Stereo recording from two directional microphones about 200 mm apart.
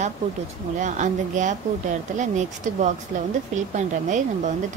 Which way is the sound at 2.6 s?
40° right (ahead or behind).